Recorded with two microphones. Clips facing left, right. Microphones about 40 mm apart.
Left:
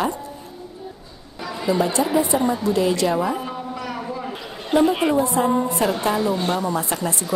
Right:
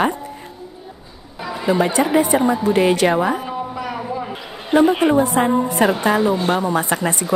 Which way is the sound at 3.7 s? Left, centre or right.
Centre.